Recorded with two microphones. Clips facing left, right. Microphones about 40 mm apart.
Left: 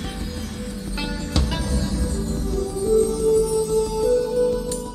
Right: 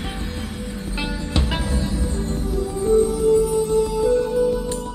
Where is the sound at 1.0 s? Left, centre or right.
Right.